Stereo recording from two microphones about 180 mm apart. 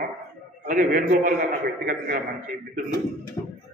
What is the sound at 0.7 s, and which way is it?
Speech, 50° right (ahead or behind).